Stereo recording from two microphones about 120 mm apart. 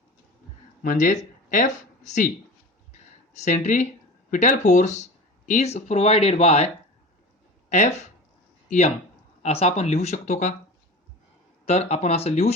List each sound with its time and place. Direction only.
0.9 s speech: 90° left
3.3 s speech: 75° left (ahead or behind)
5.5 s speech: 65° left (ahead or behind)
7.7 s speech: 70° left (ahead or behind)
9.4 s speech: 60° left (ahead or behind)
11.6 s speech: 65° left (ahead or behind)